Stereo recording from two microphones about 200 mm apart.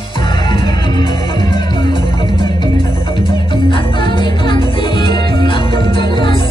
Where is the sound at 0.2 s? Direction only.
25° left (ahead or behind).